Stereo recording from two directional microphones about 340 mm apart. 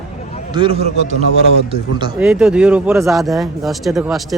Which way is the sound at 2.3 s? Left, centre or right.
Centre.